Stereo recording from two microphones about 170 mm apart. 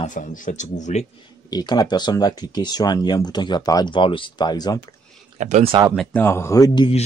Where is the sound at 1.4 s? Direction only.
25° left (ahead or behind).